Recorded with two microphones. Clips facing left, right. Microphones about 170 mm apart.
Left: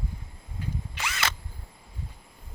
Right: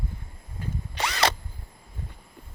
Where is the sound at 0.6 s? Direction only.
35° right (ahead or behind).